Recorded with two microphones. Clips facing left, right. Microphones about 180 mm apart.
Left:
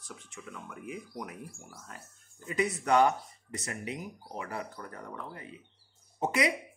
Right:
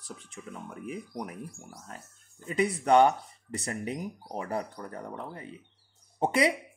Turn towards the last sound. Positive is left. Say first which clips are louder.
# right 4 dB
turn(degrees=-30)  # may be behind; listen again after turning